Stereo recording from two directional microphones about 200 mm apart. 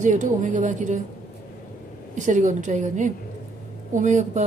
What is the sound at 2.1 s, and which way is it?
A woman's voice, 40° right (ahead or behind).